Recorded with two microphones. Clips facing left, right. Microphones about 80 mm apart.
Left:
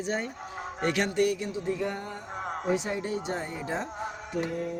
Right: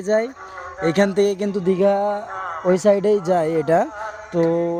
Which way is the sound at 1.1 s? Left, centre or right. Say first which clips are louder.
Right 9 dB; right.